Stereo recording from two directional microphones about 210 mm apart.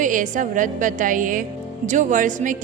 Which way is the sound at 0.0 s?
40° right (ahead or behind).